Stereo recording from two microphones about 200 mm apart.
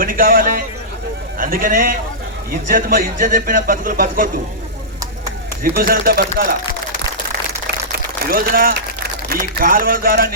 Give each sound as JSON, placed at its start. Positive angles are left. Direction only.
{"t": 0.0, "sound": "a man's voice", "side_deg": -45}
{"t": 5.7, "sound": "a man's voice", "side_deg": -50}
{"t": 7.9, "sound": "a man's voice", "side_deg": -50}